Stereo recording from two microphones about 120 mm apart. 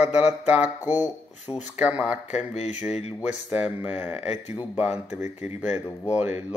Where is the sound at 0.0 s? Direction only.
10° right (ahead or behind).